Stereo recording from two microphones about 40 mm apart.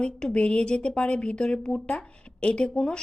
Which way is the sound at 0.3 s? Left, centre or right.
Left.